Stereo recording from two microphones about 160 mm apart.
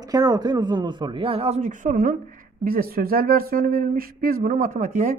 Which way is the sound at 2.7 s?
70° right (ahead or behind).